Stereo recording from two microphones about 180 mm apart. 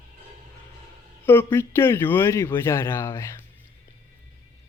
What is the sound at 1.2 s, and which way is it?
Speech, 10° left (ahead or behind).